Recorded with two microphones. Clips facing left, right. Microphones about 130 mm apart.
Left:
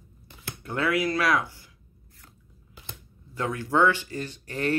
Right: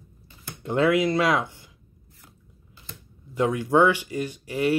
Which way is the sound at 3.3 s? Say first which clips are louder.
Right 6 dB; 20° right (ahead or behind).